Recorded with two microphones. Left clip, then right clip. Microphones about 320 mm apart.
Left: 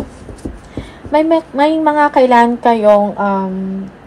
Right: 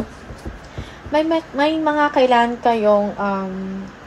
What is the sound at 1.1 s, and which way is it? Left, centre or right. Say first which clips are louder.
A woman's voice: left 6 dB; left.